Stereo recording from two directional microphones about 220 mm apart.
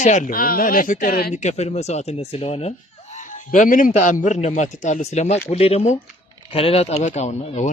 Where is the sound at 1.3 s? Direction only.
30° left (ahead or behind).